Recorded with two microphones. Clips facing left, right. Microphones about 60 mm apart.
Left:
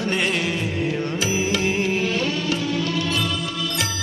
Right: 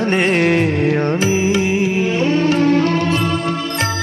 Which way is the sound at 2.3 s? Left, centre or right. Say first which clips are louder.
Right 10 dB; right.